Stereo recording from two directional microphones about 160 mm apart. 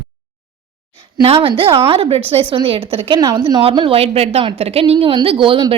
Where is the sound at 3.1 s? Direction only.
25° right (ahead or behind).